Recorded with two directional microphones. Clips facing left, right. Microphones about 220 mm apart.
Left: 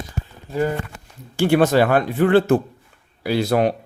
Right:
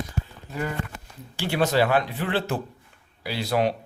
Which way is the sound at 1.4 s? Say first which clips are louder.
Left 7 dB; 50° left (ahead or behind).